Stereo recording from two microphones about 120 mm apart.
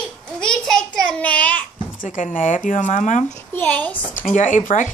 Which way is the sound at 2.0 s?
90° left.